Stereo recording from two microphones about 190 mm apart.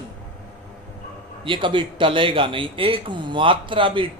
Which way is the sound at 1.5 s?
25° right (ahead or behind).